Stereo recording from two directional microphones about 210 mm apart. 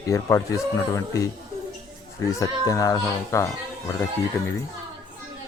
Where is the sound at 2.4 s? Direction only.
15° left (ahead or behind).